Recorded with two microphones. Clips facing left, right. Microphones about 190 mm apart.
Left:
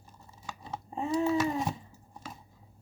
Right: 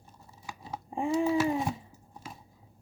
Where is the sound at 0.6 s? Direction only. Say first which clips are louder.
Right 3 dB; 15° right (ahead or behind).